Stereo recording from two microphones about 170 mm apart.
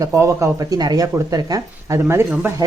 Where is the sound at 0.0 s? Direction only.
15° right (ahead or behind).